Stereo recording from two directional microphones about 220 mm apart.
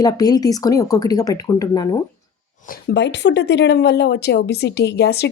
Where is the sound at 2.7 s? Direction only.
50° left (ahead or behind).